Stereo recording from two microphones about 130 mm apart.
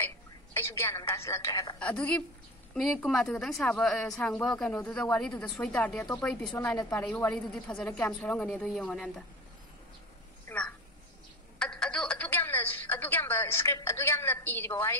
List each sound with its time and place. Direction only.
0.6 s a woman's voice: 20° left (ahead or behind)
1.8 s a woman's voice: 10° left (ahead or behind)
10.5 s a sound: 15° left (ahead or behind)
11.5 s telephone: 5° left (ahead or behind)